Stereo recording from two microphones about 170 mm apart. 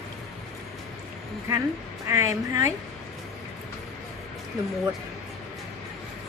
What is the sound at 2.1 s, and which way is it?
Speech, 15° right (ahead or behind).